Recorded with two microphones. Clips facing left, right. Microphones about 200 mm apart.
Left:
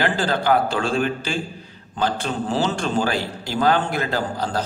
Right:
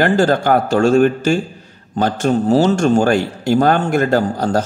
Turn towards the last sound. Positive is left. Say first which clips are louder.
# right 8 dB
turn(degrees=-45)  # may be behind; listen again after turning